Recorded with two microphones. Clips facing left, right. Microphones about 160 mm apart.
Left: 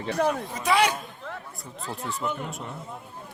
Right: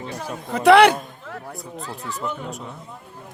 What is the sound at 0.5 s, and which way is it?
Speech, 65° right (ahead or behind).